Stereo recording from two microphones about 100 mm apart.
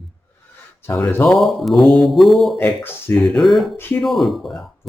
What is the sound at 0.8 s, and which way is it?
Speech, 25° left (ahead or behind).